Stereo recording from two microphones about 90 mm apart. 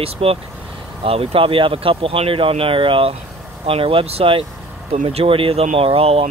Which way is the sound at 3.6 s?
90° right.